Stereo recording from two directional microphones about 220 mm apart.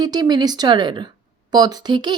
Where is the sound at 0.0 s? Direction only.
20° right (ahead or behind).